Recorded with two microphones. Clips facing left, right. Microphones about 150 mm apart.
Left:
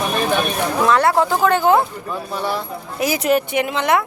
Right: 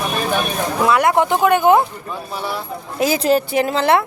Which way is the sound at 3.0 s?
25° right (ahead or behind).